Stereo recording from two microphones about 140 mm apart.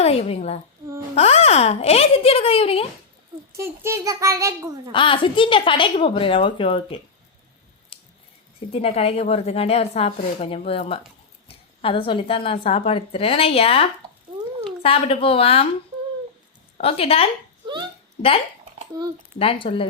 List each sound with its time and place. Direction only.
0.0 s a woman's voice: 45° left (ahead or behind)
3.5 s a child's voice: 20° right (ahead or behind)
4.9 s a woman's voice: 35° left (ahead or behind)
8.7 s a woman's voice: 45° left (ahead or behind)
16.8 s a woman's voice: 45° left (ahead or behind)
19.4 s a woman's voice: 40° left (ahead or behind)